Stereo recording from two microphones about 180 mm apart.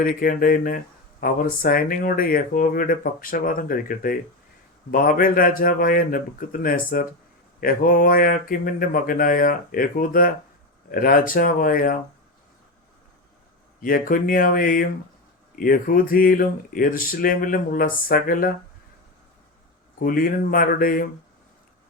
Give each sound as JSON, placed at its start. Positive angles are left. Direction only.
{"t": 0.0, "sound": "speech", "side_deg": 50}
{"t": 13.8, "sound": "speech", "side_deg": 50}
{"t": 20.0, "sound": "speech", "side_deg": 55}